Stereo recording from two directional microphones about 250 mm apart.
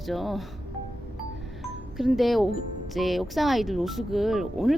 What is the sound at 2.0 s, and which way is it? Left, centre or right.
Speech, centre.